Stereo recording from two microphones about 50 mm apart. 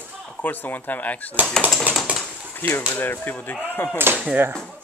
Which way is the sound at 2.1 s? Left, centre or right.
Right.